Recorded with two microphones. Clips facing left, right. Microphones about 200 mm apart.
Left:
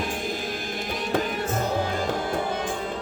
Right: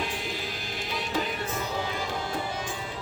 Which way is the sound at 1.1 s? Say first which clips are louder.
Left 6 dB; 50° left (ahead or behind).